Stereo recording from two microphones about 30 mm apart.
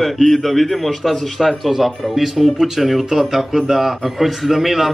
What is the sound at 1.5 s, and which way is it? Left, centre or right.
Speech, centre.